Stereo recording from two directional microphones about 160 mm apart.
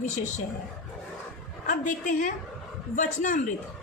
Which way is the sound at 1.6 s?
55° left (ahead or behind).